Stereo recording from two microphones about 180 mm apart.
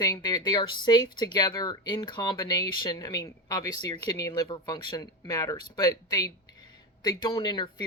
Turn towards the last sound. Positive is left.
turn(degrees=25)  # may be behind; listen again after turning